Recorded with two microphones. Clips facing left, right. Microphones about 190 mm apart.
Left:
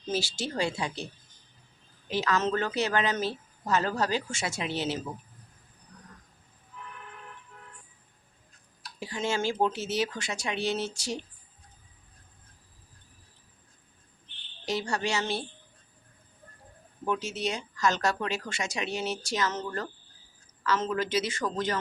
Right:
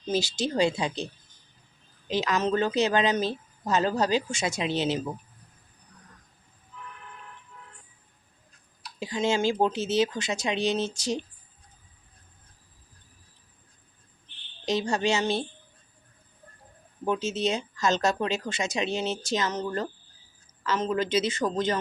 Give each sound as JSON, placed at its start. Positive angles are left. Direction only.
{"t": 0.1, "sound": "speech", "side_deg": -20}
{"t": 2.0, "sound": "speech", "side_deg": -20}
{"t": 9.0, "sound": "speech", "side_deg": -20}
{"t": 14.6, "sound": "speech", "side_deg": -20}
{"t": 17.1, "sound": "speech", "side_deg": -25}